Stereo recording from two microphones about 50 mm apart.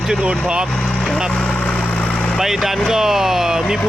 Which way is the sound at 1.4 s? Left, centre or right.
Left.